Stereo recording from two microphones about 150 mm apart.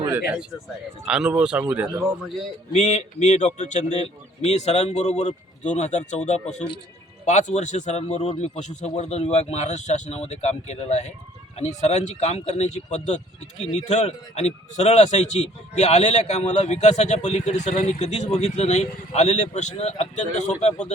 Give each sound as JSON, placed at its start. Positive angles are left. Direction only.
{"t": 1.0, "sound": "speech", "side_deg": -5}
{"t": 2.7, "sound": "a man's voice", "side_deg": 45}